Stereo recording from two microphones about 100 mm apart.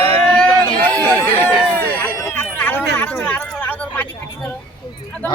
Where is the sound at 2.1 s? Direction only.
25° left (ahead or behind).